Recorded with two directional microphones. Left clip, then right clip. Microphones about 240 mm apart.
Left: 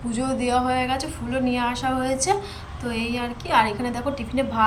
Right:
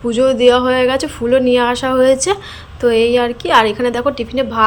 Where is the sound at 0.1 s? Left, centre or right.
Centre.